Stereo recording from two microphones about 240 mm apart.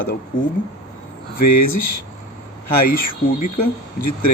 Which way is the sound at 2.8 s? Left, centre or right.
Left.